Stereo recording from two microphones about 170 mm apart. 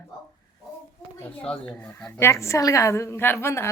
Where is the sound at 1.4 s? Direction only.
5° left (ahead or behind).